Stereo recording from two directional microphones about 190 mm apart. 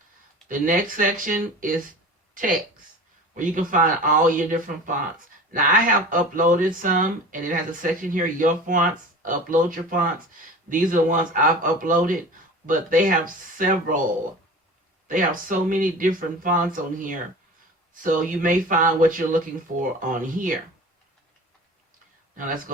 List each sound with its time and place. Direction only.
0.4 s speech: 45° right (ahead or behind)
15.0 s speech: 45° right (ahead or behind)
22.4 s speech: 45° right (ahead or behind)